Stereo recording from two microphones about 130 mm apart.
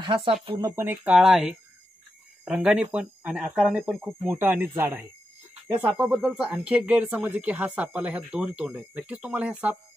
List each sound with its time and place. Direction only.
0.0 s speech: 40° right (ahead or behind)
0.6 s speech: 25° right (ahead or behind)
1.1 s speech: 5° right (ahead or behind)
4.4 s speech: 15° right (ahead or behind)
6.1 s speech: centre (ahead or behind)